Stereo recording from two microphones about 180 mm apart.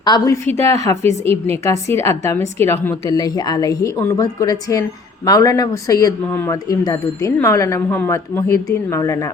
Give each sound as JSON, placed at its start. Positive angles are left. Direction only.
{"t": 0.0, "sound": "a woman's voice", "side_deg": 20}
{"t": 0.5, "sound": "speech", "side_deg": -35}
{"t": 0.9, "sound": "a woman's voice", "side_deg": 15}